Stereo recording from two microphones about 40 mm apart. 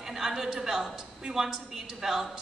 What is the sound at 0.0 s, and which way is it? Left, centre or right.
A woman's voice, centre.